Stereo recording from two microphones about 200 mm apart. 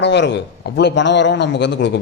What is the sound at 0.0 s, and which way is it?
A man's voice, 60° left (ahead or behind).